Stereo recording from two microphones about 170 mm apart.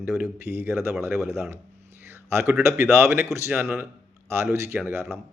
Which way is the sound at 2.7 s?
15° right (ahead or behind).